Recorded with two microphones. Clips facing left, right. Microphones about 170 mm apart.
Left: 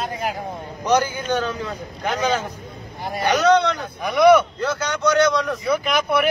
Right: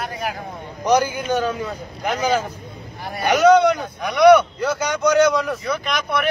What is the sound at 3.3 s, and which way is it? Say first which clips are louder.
Speech: right 4 dB; 10° right (ahead or behind).